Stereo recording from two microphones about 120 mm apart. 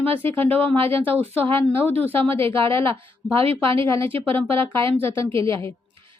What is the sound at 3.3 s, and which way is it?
Speech, 50° right (ahead or behind).